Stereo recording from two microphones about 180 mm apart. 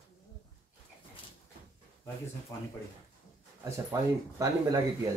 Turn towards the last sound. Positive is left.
turn(degrees=-15)  # may be behind; listen again after turning